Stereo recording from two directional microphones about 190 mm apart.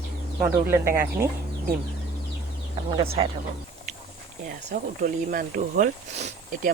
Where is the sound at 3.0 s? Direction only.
30° right (ahead or behind).